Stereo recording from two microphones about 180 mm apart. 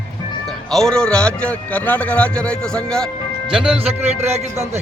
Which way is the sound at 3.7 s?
35° right (ahead or behind).